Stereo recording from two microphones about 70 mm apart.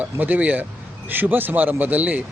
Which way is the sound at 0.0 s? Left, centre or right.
Right.